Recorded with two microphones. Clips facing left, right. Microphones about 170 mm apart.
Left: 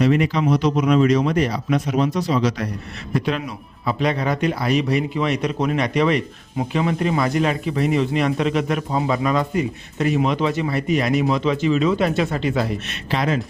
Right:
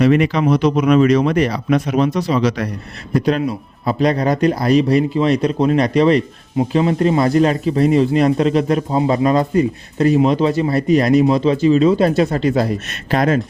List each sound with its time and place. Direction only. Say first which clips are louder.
0.0 s speech: right 4 dB; 65° right (ahead or behind)
3.2 s speech: right 7 dB; 40° right (ahead or behind)